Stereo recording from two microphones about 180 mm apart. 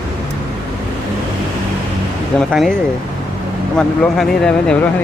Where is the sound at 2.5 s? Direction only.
Centre (ahead or behind).